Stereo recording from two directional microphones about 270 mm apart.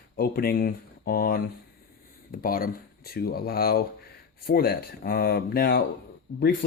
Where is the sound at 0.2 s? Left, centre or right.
Left.